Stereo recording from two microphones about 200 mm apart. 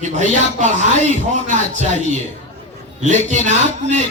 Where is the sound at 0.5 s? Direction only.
35° right (ahead or behind).